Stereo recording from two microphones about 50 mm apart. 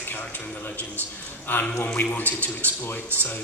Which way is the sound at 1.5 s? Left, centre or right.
Left.